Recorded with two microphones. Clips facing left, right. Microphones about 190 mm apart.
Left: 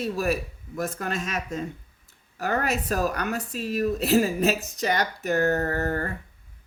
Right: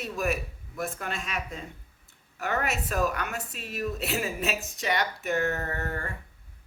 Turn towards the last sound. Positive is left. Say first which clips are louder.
# left 7 dB
turn(degrees=40)  # may be behind; listen again after turning